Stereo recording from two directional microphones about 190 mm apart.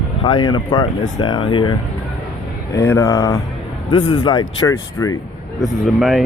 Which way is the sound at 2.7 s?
15° left (ahead or behind).